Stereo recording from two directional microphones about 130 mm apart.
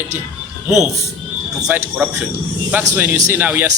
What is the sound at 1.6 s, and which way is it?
A man's voice, 10° right (ahead or behind).